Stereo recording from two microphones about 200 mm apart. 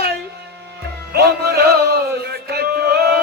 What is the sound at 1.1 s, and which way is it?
Music, 55° right (ahead or behind).